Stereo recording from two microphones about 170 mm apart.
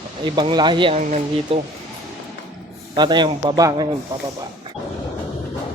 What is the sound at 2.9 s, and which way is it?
Speech, 25° right (ahead or behind).